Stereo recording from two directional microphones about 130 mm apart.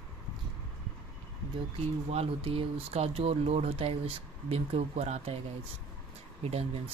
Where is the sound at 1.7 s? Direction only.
50° right (ahead or behind).